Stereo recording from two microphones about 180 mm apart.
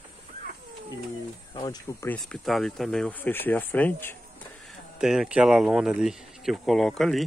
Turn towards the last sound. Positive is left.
turn(degrees=0)  # may be behind; listen again after turning